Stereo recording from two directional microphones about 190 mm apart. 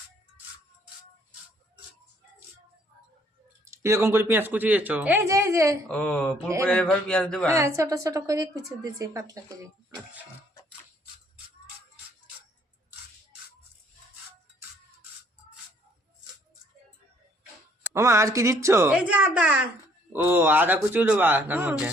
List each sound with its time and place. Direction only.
3.7 s a woman's voice: 15° right (ahead or behind)
5.9 s a man's voice: 5° left (ahead or behind)
7.4 s a woman's voice: 15° right (ahead or behind)
17.9 s a woman's voice: 15° right (ahead or behind)